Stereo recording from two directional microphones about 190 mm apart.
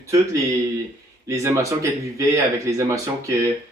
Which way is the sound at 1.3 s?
15° right (ahead or behind).